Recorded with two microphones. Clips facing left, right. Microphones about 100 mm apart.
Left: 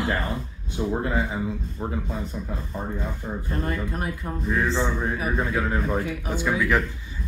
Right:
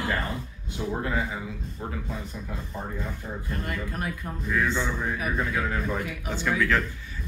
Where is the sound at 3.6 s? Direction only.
30° left (ahead or behind).